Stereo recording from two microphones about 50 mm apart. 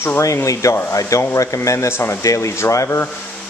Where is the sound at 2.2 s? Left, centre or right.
Left.